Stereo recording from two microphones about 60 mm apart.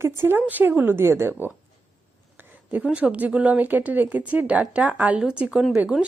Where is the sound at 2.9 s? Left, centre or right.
Right.